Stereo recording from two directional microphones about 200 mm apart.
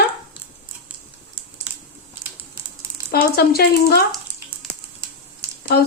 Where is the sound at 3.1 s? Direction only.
50° left (ahead or behind).